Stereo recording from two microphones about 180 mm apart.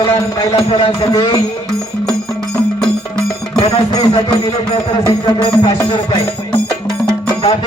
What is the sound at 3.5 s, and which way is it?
Music, 20° left (ahead or behind).